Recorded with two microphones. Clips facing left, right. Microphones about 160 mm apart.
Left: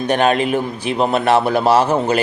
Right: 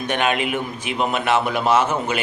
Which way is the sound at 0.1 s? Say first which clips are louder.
Left 6 dB; 35° left (ahead or behind).